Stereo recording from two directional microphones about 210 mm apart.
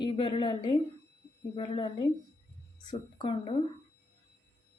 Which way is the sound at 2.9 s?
20° left (ahead or behind).